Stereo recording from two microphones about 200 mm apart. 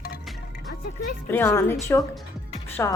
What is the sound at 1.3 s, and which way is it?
A woman's voice, 10° left (ahead or behind).